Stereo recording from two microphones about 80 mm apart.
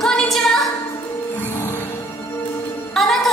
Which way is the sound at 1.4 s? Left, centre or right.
Left.